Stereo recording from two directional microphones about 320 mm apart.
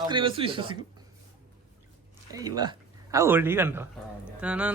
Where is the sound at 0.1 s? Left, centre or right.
Centre.